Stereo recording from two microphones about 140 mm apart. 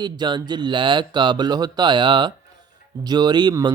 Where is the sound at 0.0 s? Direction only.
30° right (ahead or behind).